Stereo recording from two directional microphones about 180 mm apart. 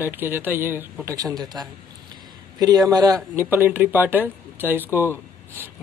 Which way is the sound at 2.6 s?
20° right (ahead or behind).